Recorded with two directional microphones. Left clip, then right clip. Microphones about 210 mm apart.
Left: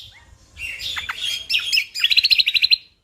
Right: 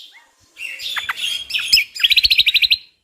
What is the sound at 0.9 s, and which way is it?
Bird, 15° right (ahead or behind).